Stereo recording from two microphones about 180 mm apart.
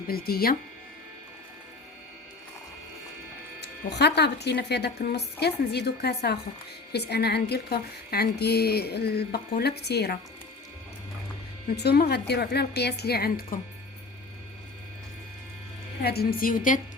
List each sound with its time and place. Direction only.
0.1 s a woman's voice: 55° left (ahead or behind)
3.6 s a woman's voice: 70° left (ahead or behind)
11.8 s a woman's voice: 65° left (ahead or behind)
16.0 s a woman's voice: 60° left (ahead or behind)